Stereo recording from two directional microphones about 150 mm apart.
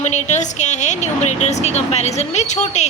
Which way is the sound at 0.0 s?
50° left (ahead or behind).